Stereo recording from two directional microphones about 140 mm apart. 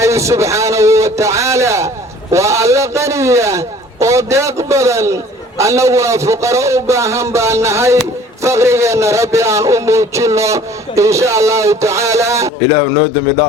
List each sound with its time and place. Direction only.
0.0 s a man's voice: 20° right (ahead or behind)